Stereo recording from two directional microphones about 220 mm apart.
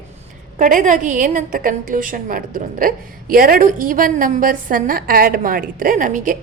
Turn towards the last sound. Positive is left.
turn(degrees=-35)  # may be behind; listen again after turning